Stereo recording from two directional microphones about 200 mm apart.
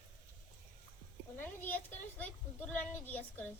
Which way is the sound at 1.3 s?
10° left (ahead or behind).